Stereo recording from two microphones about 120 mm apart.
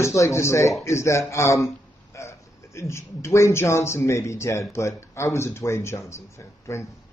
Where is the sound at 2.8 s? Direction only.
20° left (ahead or behind).